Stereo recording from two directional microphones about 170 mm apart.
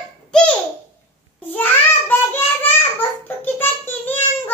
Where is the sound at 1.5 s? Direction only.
10° left (ahead or behind).